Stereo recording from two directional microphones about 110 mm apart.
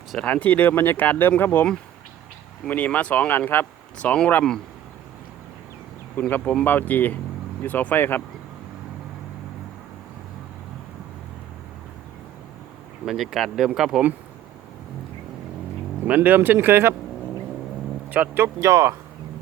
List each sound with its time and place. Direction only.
0.1 s speech: 10° left (ahead or behind)
6.1 s speech: 15° left (ahead or behind)
13.1 s speech: centre (ahead or behind)
16.0 s speech: 15° right (ahead or behind)
18.1 s speech: 15° right (ahead or behind)